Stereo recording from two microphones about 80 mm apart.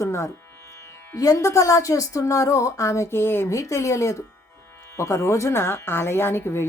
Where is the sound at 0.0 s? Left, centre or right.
Left.